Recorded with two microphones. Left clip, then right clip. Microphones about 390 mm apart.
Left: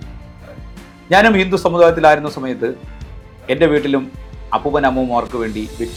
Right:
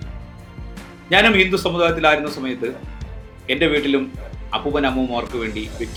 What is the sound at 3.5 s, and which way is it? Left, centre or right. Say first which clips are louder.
A man's voice: left 4 dB; left.